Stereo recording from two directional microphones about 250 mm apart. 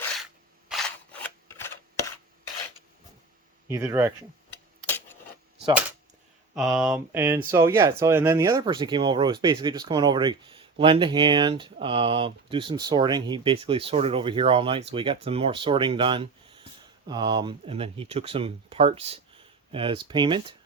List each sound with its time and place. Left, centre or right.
0.7 s scissors: centre
3.7 s speech: centre
4.9 s a sound: centre
6.5 s speech: centre